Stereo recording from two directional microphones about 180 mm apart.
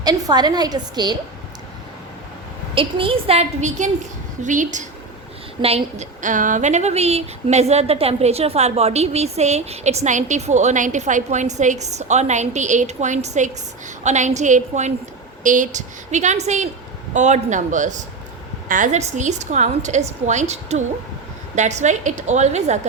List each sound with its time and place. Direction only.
0.0 s a woman's voice: 20° right (ahead or behind)
2.7 s a man's voice: 30° right (ahead or behind)